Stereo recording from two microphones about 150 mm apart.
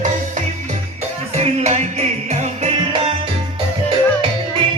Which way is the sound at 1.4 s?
45° right (ahead or behind).